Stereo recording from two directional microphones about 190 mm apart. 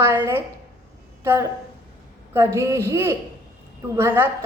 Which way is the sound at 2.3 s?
15° right (ahead or behind).